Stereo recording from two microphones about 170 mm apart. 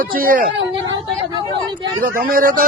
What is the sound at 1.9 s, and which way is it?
Speech, 55° right (ahead or behind).